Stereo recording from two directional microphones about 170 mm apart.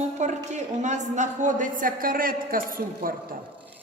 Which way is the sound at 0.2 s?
45° right (ahead or behind).